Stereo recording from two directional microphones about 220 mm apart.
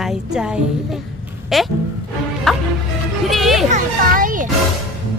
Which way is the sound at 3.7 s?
40° right (ahead or behind).